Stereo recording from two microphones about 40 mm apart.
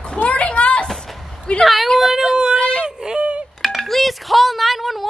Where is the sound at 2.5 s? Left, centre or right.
Left.